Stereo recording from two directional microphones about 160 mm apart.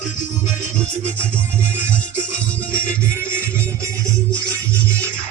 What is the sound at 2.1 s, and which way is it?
Music, 5° left (ahead or behind).